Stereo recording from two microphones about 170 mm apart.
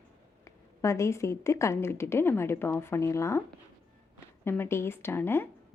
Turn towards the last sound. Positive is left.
turn(degrees=15)  # may be behind; listen again after turning